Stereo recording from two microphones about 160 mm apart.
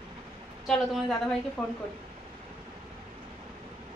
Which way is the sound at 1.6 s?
5° left (ahead or behind).